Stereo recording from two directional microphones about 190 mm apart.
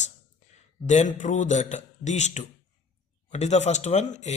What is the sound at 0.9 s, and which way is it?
Speech, 40° left (ahead or behind).